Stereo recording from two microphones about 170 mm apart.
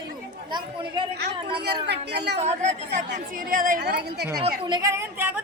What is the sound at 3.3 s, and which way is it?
Speech, 55° right (ahead or behind).